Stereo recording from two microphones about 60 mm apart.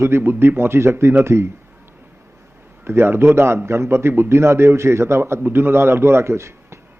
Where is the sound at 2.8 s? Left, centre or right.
Right.